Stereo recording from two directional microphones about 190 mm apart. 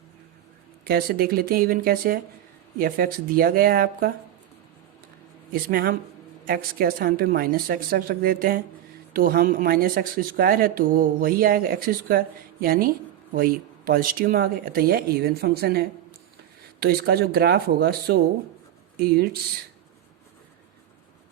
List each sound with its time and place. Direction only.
0.9 s speech: 55° right (ahead or behind)
5.6 s speech: 50° right (ahead or behind)